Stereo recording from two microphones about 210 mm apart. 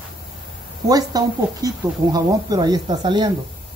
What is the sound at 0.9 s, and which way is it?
Speech, 15° right (ahead or behind).